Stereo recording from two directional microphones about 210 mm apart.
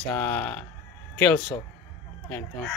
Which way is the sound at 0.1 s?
10° left (ahead or behind).